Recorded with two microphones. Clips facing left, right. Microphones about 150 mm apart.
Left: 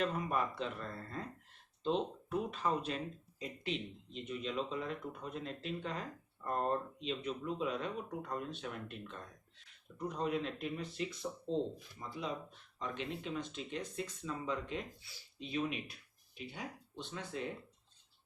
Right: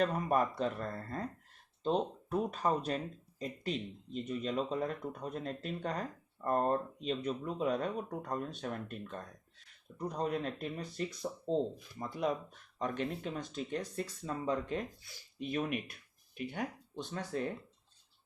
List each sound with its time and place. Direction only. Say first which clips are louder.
0.0 s speech: right 5 dB; 40° right (ahead or behind)
11.9 s speech: right 8 dB; 50° right (ahead or behind)
17.0 s speech: right 5 dB; 40° right (ahead or behind)